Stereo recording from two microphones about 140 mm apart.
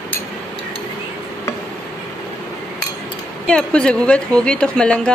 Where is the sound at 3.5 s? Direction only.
5° left (ahead or behind).